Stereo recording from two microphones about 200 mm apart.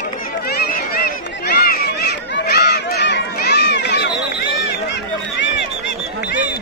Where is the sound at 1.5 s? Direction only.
50° left (ahead or behind).